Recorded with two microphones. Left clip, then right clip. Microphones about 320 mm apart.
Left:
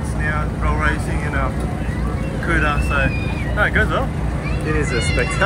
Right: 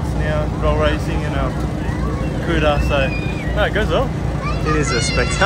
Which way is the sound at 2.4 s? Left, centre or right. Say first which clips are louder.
Right 1 dB; right.